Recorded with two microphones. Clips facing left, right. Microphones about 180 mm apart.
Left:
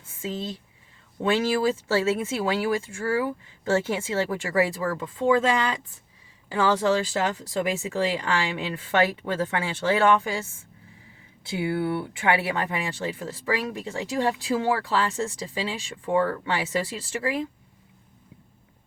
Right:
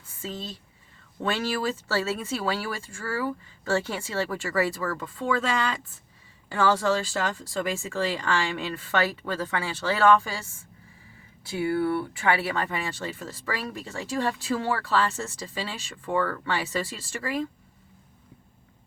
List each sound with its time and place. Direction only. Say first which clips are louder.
0.2 s speech: left 4 dB; 15° left (ahead or behind)
11.4 s speech: right 1 dB; 20° left (ahead or behind)